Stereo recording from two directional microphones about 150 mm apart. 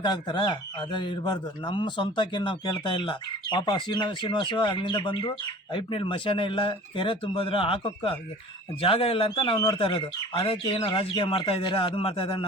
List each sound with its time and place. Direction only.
0.0 s speech: 30° left (ahead or behind)